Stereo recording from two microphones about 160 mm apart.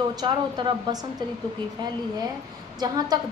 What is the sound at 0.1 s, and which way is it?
Speech, 25° right (ahead or behind).